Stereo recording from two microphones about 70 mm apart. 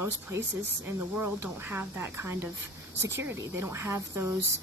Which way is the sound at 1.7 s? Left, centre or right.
Right.